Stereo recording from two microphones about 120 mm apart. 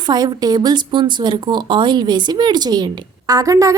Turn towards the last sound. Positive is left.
turn(degrees=-30)  # may be behind; listen again after turning